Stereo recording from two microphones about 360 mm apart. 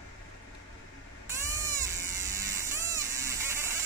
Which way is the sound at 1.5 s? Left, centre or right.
Centre.